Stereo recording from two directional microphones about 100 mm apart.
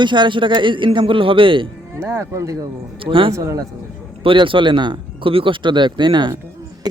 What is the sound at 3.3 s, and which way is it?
Speech, 35° right (ahead or behind).